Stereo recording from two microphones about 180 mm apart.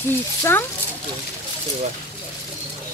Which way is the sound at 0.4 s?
15° left (ahead or behind).